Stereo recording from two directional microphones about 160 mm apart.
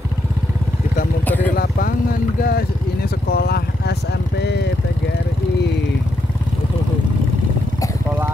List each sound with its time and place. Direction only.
1.2 s vehicle: 10° left (ahead or behind)
1.5 s vehicle: 65° left (ahead or behind); by 3.9 s 80° left